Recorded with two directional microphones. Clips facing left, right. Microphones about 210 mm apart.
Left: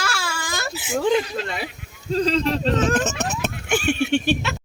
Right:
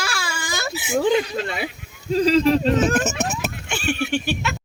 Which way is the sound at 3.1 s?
Centre (ahead or behind).